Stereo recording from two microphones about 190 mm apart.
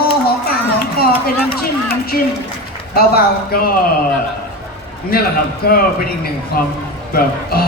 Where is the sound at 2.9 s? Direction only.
55° left (ahead or behind).